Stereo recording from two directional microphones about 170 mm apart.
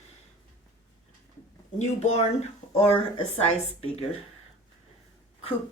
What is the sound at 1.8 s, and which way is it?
Speech, 40° left (ahead or behind).